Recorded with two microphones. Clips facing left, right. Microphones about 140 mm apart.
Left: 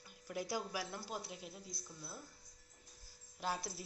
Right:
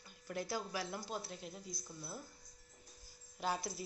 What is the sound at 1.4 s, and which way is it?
Speech, centre (ahead or behind).